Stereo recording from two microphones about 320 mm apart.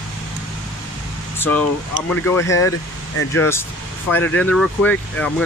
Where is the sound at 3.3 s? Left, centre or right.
Centre.